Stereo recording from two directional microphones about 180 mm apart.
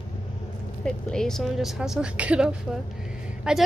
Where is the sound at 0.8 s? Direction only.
5° left (ahead or behind).